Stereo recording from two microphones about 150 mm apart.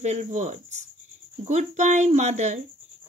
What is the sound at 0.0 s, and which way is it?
Speech, 50° right (ahead or behind).